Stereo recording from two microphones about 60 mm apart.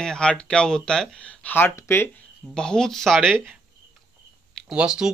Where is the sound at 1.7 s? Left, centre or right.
Left.